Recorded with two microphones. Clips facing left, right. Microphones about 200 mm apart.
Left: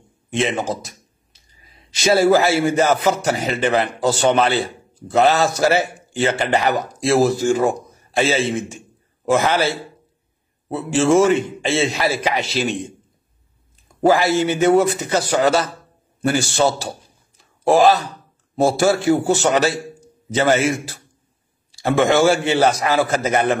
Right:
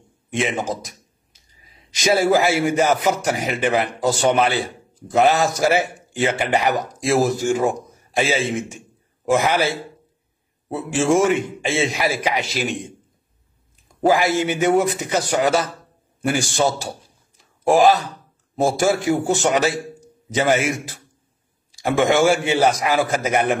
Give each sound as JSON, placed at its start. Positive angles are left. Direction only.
{"t": 2.0, "sound": "a man's voice", "side_deg": -15}
{"t": 10.7, "sound": "a man's voice", "side_deg": -15}
{"t": 14.0, "sound": "a man's voice", "side_deg": -15}